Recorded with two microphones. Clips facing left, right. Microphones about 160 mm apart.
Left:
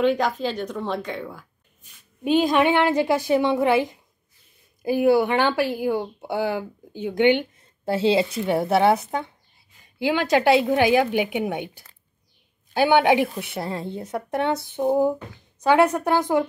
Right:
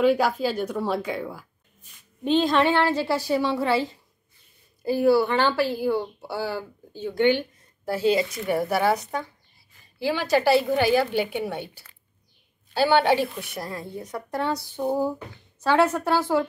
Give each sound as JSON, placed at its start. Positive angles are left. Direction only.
{"t": 0.0, "sound": "speech", "side_deg": -5}
{"t": 2.2, "sound": "speech", "side_deg": 10}